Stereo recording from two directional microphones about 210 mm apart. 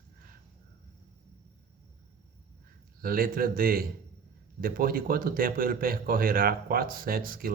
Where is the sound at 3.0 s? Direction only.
45° right (ahead or behind).